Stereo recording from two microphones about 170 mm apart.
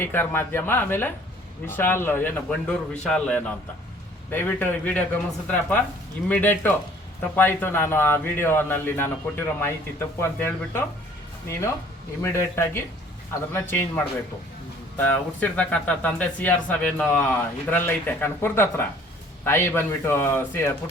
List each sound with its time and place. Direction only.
0.0 s speech: 15° left (ahead or behind)
12.2 s speech: 15° left (ahead or behind)